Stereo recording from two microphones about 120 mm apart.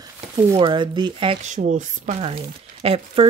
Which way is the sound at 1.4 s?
90° right.